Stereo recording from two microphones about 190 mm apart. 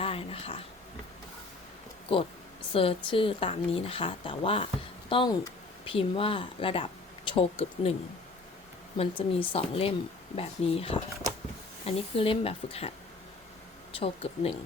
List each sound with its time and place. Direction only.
0.0 s a sound: 30° left (ahead or behind)
2.7 s speech: 30° left (ahead or behind)
9.0 s a woman's voice: 30° left (ahead or behind)
14.0 s a woman's voice: 30° left (ahead or behind)